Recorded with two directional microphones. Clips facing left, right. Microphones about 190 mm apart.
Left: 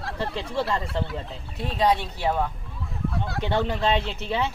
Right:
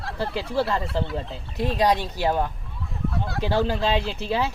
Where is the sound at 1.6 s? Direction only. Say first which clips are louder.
Right 2 dB; 15° right (ahead or behind).